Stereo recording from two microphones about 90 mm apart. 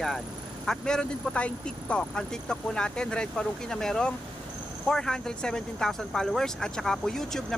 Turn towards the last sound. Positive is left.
turn(degrees=5)  # may be behind; listen again after turning